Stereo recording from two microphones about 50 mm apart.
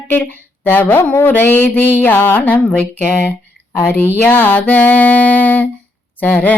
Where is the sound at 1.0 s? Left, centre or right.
Left.